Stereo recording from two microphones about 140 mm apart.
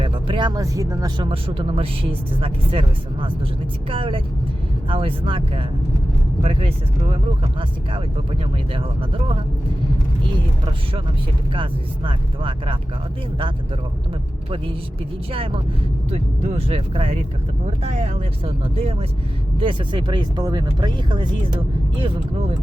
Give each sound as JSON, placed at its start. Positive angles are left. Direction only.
{"t": 0.0, "sound": "speech", "side_deg": -35}
{"t": 8.7, "sound": "speech", "side_deg": -40}
{"t": 11.5, "sound": "speech", "side_deg": -35}
{"t": 16.0, "sound": "speech", "side_deg": -50}